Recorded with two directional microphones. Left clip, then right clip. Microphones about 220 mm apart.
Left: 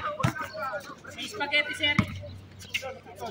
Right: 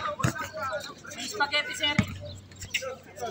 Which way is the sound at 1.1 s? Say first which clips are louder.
Even; 10° right (ahead or behind).